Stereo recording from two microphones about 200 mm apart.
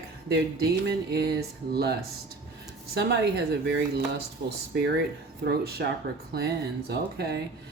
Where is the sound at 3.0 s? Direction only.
55° right (ahead or behind).